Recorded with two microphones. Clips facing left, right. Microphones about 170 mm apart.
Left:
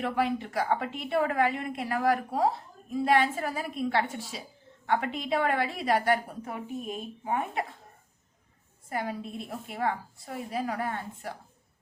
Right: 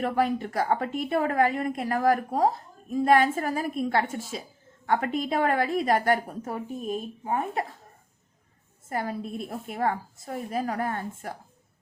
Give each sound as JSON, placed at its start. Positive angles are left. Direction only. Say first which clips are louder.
{"t": 0.0, "sound": "a woman's voice", "louder": "right 3 dB", "side_deg": -45}
{"t": 8.9, "sound": "a woman's voice", "louder": "right 3 dB", "side_deg": -45}